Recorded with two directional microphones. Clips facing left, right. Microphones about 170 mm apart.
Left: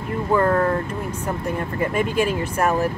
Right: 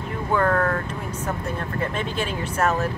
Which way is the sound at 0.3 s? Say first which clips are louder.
Left 3 dB; 10° left (ahead or behind).